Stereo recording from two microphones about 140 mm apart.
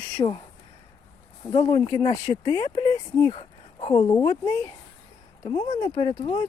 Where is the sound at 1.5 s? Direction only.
40° left (ahead or behind).